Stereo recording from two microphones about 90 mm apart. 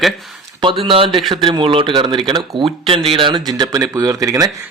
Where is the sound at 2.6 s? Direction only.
90° right.